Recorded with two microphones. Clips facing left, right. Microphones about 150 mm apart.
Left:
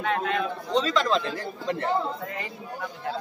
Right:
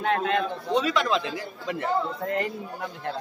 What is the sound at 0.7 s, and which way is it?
Speech, 10° right (ahead or behind).